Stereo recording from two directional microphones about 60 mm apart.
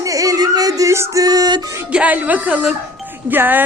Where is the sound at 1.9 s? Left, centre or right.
Right.